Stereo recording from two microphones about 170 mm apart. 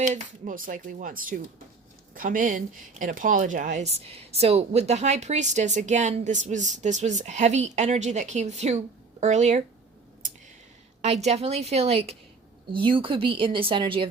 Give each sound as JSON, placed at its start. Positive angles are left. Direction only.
{"t": 0.0, "sound": "speech", "side_deg": -50}
{"t": 11.0, "sound": "speech", "side_deg": -40}